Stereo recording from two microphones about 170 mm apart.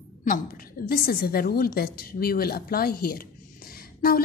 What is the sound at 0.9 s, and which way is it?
A woman's voice, 60° left (ahead or behind).